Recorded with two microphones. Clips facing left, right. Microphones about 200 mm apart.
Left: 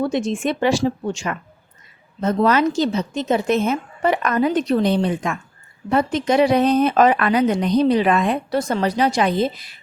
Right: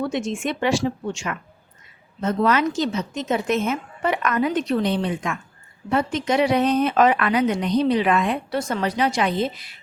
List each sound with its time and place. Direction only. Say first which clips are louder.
0.0 s a woman's voice: left 4 dB; 35° left (ahead or behind)